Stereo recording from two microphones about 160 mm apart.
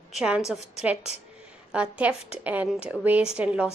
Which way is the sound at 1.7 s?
10° right (ahead or behind).